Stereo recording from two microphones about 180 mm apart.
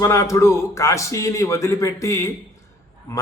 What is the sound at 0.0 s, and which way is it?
A man's voice, 15° left (ahead or behind).